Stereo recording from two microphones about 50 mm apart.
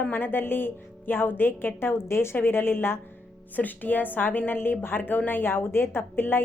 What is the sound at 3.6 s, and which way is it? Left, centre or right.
A woman's voice, left.